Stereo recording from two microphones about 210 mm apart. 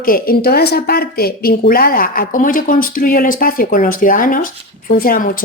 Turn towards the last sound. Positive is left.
turn(degrees=40)  # may be behind; listen again after turning